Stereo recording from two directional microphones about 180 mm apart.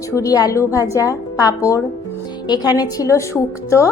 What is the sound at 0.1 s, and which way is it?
A woman's voice, 20° left (ahead or behind).